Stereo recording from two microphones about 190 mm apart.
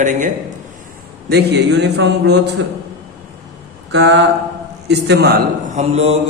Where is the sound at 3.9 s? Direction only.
70° right (ahead or behind).